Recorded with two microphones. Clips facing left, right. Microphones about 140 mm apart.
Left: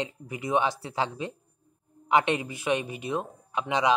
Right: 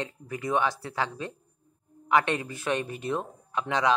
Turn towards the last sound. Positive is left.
turn(degrees=15)  # may be behind; listen again after turning